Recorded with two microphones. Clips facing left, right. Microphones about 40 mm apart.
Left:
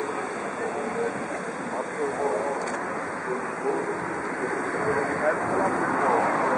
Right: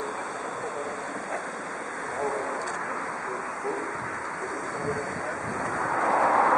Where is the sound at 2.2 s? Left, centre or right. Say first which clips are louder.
Left 2 dB; centre.